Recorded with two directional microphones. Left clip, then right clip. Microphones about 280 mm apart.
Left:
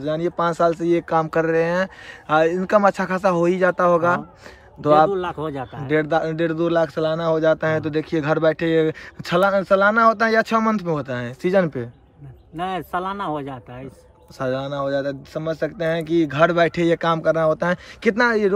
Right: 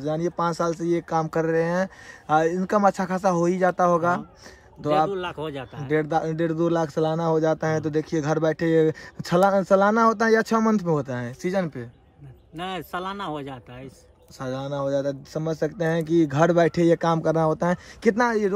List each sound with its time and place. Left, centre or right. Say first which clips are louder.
0.0 s speech: left 4 dB; centre
5.1 s a man's voice: left 5 dB; centre
5.9 s speech: left 4 dB; centre